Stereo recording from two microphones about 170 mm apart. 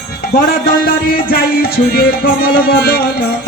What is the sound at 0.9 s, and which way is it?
Music, 60° left (ahead or behind).